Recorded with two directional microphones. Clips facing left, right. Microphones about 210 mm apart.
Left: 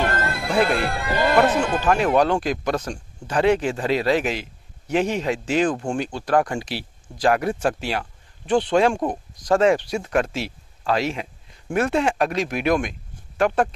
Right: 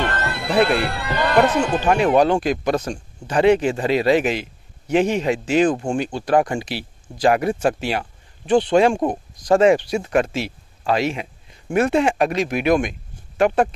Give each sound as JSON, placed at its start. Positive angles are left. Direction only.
{"t": 0.1, "sound": "music", "side_deg": 45}
{"t": 1.2, "sound": "speech", "side_deg": 0}
{"t": 8.0, "sound": "a sound", "side_deg": -15}
{"t": 8.7, "sound": "speech", "side_deg": -10}